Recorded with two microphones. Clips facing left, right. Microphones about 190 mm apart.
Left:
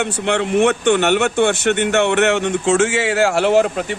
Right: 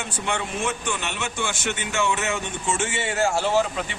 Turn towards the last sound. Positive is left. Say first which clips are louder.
# left 8 dB
turn(degrees=55)  # may be behind; listen again after turning